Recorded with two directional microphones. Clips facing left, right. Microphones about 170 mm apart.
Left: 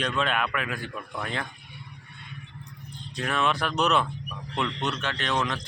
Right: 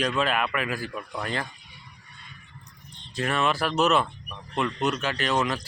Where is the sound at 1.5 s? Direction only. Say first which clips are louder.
Left 4 dB; 55° left (ahead or behind).